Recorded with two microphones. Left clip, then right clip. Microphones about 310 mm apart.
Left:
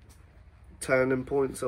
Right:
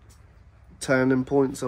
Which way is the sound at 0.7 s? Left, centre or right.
Right.